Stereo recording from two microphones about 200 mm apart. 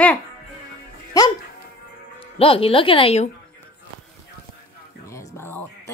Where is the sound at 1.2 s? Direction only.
15° left (ahead or behind).